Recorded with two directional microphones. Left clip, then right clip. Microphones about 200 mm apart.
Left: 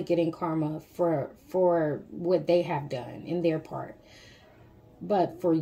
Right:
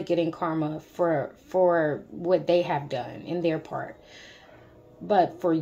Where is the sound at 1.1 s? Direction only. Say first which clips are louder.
Right 3 dB; 35° right (ahead or behind).